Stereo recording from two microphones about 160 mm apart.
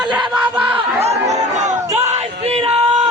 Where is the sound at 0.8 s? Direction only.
40° right (ahead or behind).